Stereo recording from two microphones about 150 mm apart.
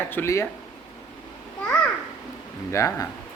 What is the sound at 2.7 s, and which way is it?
Speech, 20° left (ahead or behind).